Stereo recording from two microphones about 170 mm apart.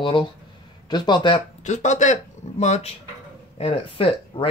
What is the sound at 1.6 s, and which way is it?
Speech, 45° left (ahead or behind).